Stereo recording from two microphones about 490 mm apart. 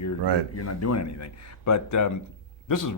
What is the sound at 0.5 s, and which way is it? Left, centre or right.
Speech, left.